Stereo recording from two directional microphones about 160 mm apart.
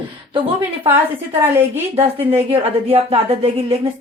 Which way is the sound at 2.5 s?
40° right (ahead or behind).